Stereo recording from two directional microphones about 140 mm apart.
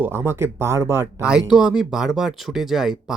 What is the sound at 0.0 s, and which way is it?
Speech, 15° right (ahead or behind).